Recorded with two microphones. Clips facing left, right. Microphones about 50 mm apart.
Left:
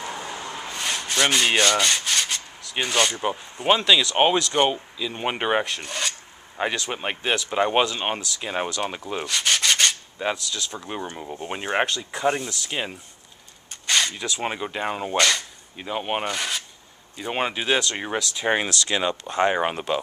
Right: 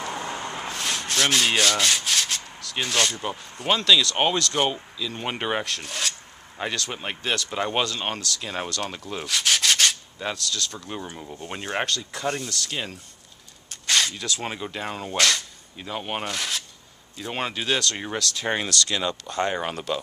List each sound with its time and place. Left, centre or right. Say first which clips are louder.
0.1 s vehicle: right 2 dB; right
0.7 s rub: left 2 dB; centre
4.9 s speech: left 3 dB; centre
6.6 s speech: left 3 dB; centre
9.2 s rub: even; centre
10.1 s speech: left 3 dB; centre
13.7 s speech: even; centre; by 20.0 s left